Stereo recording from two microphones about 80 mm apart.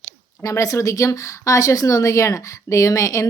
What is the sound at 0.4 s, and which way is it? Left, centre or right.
Speech, left.